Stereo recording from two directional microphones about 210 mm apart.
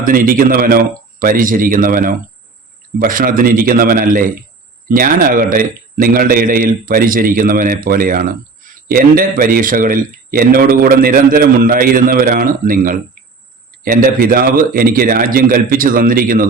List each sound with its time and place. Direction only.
0.0 s a man's voice: 40° right (ahead or behind)